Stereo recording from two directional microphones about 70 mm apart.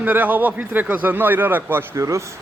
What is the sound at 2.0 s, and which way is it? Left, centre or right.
Speech, right.